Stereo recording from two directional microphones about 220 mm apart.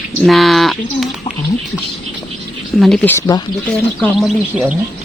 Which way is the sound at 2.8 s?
5° left (ahead or behind).